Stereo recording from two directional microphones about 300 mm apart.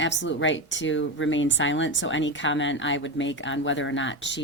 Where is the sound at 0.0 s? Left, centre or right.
Left.